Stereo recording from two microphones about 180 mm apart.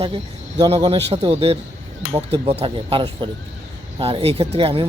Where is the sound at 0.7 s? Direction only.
35° right (ahead or behind).